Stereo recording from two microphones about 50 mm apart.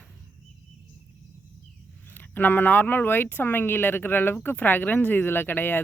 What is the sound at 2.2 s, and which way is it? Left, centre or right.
Speech, left.